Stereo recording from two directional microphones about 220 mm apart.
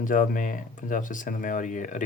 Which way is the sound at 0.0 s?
35° left (ahead or behind).